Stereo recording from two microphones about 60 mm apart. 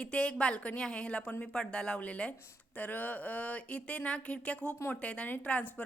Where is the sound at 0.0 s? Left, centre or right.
Centre.